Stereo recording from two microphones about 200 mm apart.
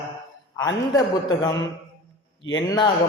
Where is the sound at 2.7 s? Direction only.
20° left (ahead or behind).